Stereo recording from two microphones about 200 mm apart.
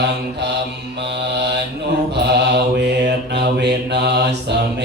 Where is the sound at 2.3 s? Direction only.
55° right (ahead or behind).